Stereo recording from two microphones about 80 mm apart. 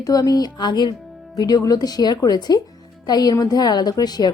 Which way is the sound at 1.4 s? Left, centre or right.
Left.